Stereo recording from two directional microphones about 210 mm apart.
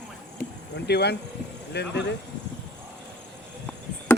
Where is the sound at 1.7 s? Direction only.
55° left (ahead or behind).